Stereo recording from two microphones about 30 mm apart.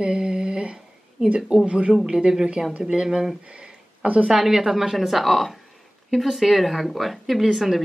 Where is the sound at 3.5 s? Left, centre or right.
Right.